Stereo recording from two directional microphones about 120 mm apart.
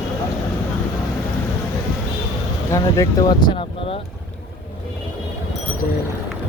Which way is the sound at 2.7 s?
25° left (ahead or behind).